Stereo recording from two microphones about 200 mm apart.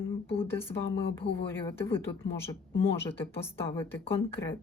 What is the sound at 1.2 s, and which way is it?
Speech, 65° left (ahead or behind).